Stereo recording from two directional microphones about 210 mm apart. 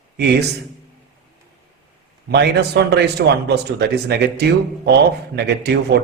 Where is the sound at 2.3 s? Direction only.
50° right (ahead or behind).